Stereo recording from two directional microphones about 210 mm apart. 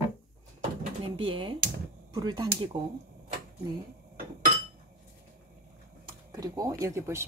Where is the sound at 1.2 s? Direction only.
25° right (ahead or behind).